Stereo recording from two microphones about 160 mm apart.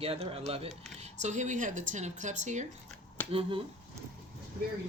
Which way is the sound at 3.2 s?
10° left (ahead or behind).